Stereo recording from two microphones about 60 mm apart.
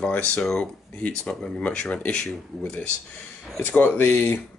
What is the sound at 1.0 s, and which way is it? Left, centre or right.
Speech, left.